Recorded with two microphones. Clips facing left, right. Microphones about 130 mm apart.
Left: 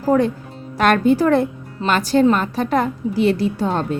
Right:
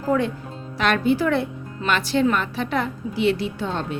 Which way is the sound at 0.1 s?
40° left (ahead or behind).